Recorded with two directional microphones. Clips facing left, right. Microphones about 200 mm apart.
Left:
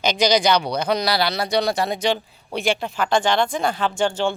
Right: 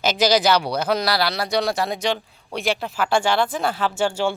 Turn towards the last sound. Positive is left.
turn(degrees=-10)  # may be behind; listen again after turning